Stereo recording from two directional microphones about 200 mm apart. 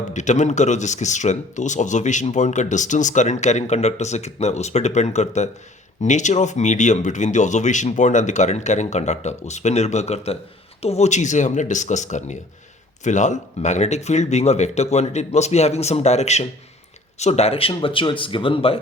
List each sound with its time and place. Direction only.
0.1 s speech: 35° left (ahead or behind)